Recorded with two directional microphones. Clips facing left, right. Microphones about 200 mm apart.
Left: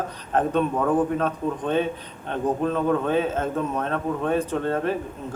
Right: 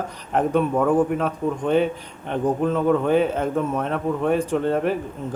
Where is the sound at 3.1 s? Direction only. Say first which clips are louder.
Right 4 dB; 15° right (ahead or behind).